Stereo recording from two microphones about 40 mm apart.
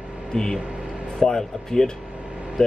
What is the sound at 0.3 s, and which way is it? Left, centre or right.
Speech, centre.